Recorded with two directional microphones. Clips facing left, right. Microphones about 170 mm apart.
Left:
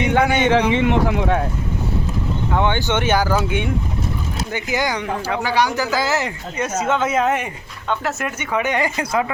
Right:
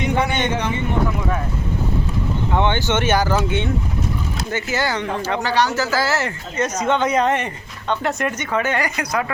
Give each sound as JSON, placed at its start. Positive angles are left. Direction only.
{"t": 0.0, "sound": "speech", "side_deg": 80}
{"t": 0.7, "sound": "speech", "side_deg": 90}
{"t": 2.6, "sound": "speech", "side_deg": 15}